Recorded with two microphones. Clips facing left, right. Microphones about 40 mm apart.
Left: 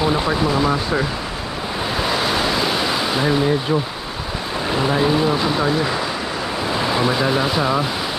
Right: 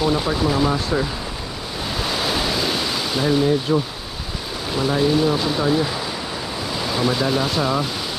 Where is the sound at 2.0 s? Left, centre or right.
Centre.